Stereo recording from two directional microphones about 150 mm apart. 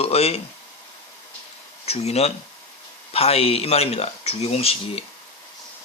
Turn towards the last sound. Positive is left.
turn(degrees=40)  # may be behind; listen again after turning